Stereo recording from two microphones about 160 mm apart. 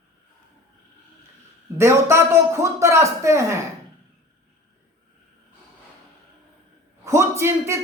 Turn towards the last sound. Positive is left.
turn(degrees=-15)  # may be behind; listen again after turning